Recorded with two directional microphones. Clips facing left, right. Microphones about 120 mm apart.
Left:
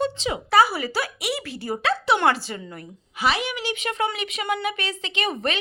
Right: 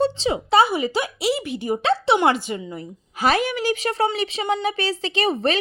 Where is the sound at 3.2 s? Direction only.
45° right (ahead or behind).